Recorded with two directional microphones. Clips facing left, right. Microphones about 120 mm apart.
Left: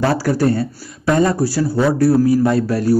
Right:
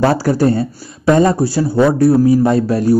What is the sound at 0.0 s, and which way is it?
Speech, 25° right (ahead or behind).